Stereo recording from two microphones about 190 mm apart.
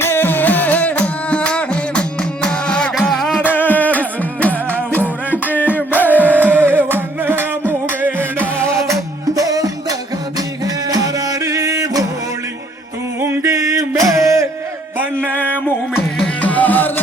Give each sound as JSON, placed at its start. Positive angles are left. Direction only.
{"t": 0.0, "sound": "music", "side_deg": 10}
{"t": 6.1, "sound": "music", "side_deg": -10}
{"t": 13.1, "sound": "music", "side_deg": -10}
{"t": 15.2, "sound": "music", "side_deg": 10}